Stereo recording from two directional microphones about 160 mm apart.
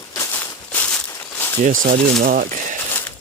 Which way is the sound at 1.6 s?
55° right (ahead or behind).